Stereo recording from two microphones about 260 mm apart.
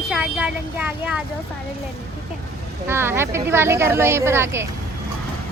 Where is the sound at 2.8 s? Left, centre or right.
Centre.